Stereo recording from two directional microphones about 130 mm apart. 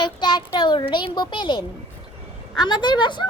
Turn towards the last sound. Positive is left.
turn(degrees=35)  # may be behind; listen again after turning